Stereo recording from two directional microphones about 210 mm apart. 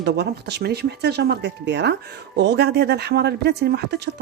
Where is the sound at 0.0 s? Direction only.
55° right (ahead or behind).